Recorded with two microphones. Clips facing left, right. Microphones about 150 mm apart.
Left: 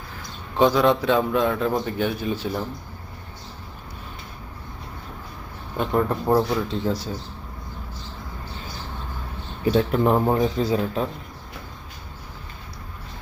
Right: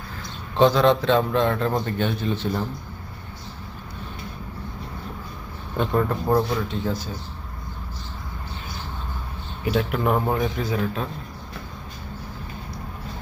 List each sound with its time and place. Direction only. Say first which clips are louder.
0.5 s a man's voice: right 1 dB; 10° left (ahead or behind)
5.7 s a man's voice: even; 10° left (ahead or behind)
6.7 s speech: left 2 dB; 30° left (ahead or behind)
9.6 s a man's voice: left 3 dB; 30° left (ahead or behind)